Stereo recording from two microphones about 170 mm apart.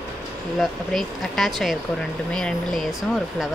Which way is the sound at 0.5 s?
Centre (ahead or behind).